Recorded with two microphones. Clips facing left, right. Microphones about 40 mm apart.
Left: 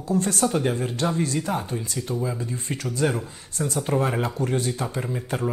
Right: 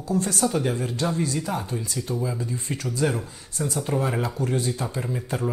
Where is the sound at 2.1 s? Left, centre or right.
Left.